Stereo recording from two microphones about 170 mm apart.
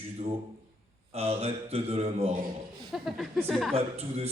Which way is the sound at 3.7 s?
35° right (ahead or behind).